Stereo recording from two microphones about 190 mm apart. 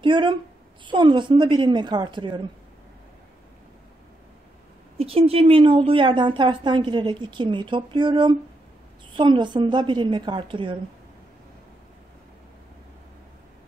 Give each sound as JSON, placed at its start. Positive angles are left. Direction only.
{"t": 0.0, "sound": "a woman's voice", "side_deg": -25}
{"t": 4.9, "sound": "a woman's voice", "side_deg": -30}